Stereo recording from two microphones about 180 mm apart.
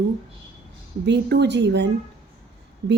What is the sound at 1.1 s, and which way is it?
Speech, 70° right (ahead or behind).